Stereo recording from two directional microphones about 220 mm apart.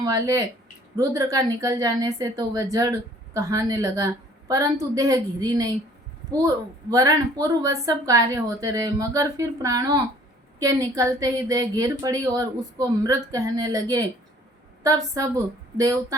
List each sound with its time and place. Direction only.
0.0 s a woman's voice: 15° right (ahead or behind)
6.9 s a woman's voice: 15° right (ahead or behind)